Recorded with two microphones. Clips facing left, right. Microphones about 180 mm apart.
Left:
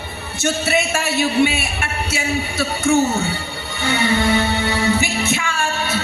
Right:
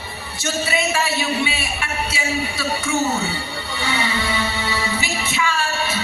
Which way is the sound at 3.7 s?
50° left (ahead or behind).